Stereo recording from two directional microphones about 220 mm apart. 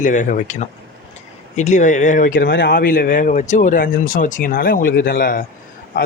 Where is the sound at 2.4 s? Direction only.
50° left (ahead or behind).